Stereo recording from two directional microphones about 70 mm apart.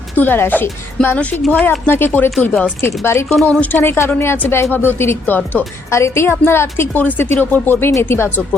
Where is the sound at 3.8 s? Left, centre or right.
Left.